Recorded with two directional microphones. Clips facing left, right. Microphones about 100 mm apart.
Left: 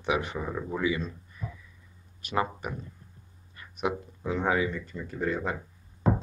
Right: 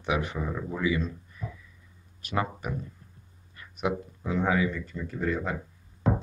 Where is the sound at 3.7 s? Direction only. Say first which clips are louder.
Right 1 dB; 20° left (ahead or behind).